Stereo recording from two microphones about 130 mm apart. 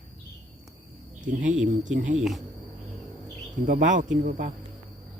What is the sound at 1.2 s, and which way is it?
Speech, 80° right.